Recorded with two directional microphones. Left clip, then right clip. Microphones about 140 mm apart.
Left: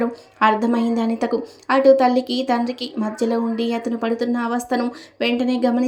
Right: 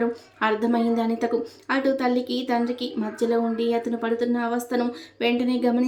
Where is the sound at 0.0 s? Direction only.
30° left (ahead or behind).